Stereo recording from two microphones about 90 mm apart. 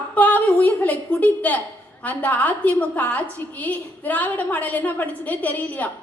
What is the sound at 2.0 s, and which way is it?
A woman's voice, 15° left (ahead or behind).